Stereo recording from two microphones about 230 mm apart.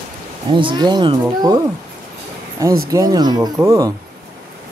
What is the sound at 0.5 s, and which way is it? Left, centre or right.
Speech, right.